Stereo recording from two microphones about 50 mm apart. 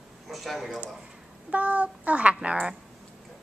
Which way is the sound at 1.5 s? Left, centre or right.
Right.